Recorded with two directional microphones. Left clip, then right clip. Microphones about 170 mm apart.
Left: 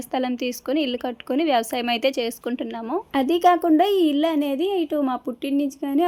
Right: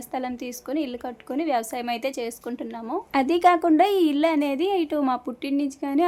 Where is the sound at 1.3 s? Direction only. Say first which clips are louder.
Left 4 dB; 25° left (ahead or behind).